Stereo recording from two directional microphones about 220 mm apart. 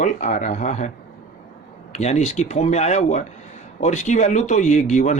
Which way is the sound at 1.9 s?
30° left (ahead or behind).